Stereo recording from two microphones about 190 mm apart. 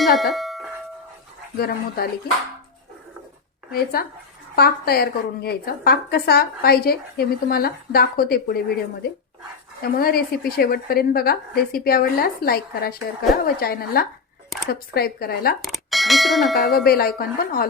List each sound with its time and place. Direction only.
0.0 s bell: centre (ahead or behind)
1.5 s a woman's voice: 50° left (ahead or behind)
3.7 s a woman's voice: 50° left (ahead or behind)
10.0 s a woman's voice: 50° left (ahead or behind)
15.6 s speech: centre (ahead or behind)
16.8 s a woman's voice: 55° left (ahead or behind)